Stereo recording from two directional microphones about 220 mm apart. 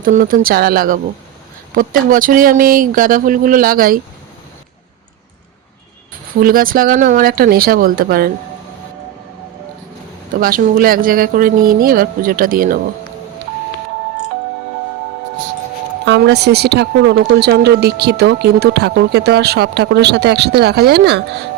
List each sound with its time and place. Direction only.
0.0 s speech: 40° right (ahead or behind)
6.4 s speech: 40° right (ahead or behind)
10.4 s speech: 40° right (ahead or behind)
16.0 s speech: 50° right (ahead or behind)